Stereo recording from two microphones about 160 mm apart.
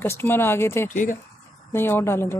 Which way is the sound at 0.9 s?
55° left (ahead or behind).